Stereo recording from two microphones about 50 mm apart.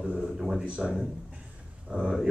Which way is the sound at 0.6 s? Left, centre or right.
Right.